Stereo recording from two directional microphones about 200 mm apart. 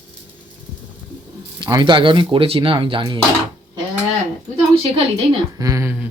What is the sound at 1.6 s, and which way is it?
Speech, 20° right (ahead or behind).